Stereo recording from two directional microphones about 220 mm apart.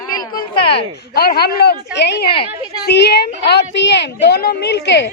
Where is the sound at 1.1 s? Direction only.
45° left (ahead or behind).